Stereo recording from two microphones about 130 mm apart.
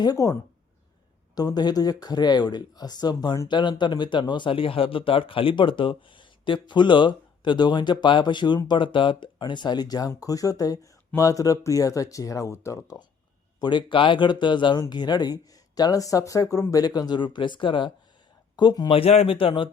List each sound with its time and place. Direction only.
0.0 s speech: 30° left (ahead or behind)
1.4 s speech: 30° left (ahead or behind)
13.6 s speech: 35° left (ahead or behind)